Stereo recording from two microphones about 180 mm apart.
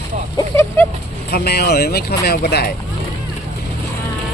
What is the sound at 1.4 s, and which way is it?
Speech, 65° left (ahead or behind).